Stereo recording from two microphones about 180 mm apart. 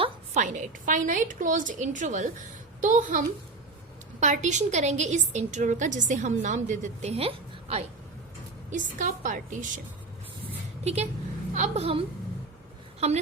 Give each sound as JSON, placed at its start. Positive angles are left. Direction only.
{"t": 0.0, "sound": "a woman's voice", "side_deg": -40}
{"t": 8.7, "sound": "a woman's voice", "side_deg": -45}
{"t": 10.8, "sound": "a woman's voice", "side_deg": -35}